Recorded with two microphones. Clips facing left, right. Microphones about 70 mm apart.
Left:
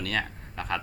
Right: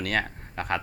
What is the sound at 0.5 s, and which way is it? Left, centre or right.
Speech, right.